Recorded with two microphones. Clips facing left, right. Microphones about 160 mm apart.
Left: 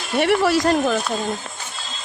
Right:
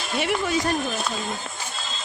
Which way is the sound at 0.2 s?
70° left (ahead or behind).